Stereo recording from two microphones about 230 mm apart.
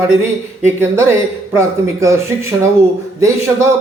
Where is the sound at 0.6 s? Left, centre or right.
Centre.